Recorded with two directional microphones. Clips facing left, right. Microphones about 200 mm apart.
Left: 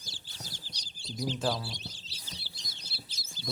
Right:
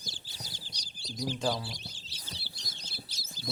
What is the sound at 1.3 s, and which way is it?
Speech, 5° left (ahead or behind).